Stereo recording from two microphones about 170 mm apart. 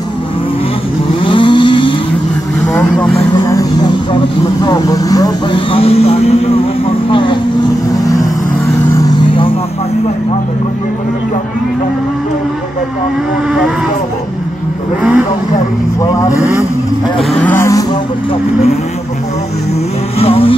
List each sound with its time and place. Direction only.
1.2 s vehicle: 30° left (ahead or behind)
2.7 s vehicle: 10° left (ahead or behind)
3.5 s music: 25° left (ahead or behind)
4.6 s vehicle: 20° left (ahead or behind)
7.9 s vehicle: 20° left (ahead or behind)
16.0 s vehicle: 20° left (ahead or behind)
17.4 s music: 10° left (ahead or behind)
20.2 s vehicle: 35° left (ahead or behind)